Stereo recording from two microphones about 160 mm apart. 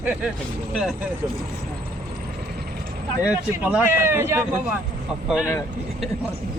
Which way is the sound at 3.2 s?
10° right (ahead or behind).